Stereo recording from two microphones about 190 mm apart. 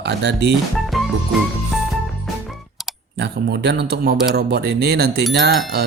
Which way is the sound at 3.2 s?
60° right (ahead or behind).